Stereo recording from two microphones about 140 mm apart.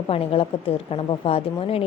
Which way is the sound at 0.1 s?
40° left (ahead or behind).